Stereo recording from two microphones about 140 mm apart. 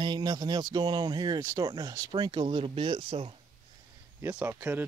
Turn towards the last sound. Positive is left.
turn(degrees=-15)  # may be behind; listen again after turning